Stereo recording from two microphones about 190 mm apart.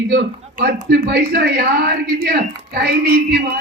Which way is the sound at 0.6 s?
55° right (ahead or behind).